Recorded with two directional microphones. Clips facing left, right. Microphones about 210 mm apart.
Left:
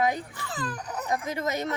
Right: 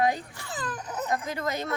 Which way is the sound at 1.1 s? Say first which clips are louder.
Left 2 dB; 20° left (ahead or behind).